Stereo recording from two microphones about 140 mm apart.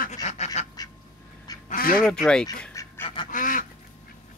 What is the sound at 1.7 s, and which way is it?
Goose, 90° left.